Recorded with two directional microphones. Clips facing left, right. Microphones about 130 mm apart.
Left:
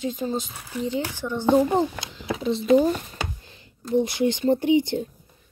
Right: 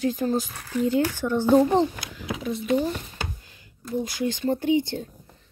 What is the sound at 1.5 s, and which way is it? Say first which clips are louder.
Speech: right 1 dB; 10° left (ahead or behind).